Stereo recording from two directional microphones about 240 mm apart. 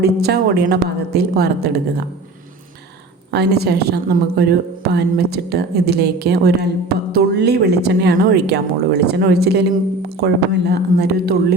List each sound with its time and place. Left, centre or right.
0.0 s a woman's voice: right
3.3 s a woman's voice: right